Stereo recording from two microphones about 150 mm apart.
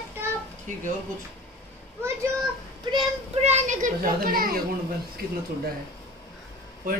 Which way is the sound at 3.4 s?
50° right (ahead or behind).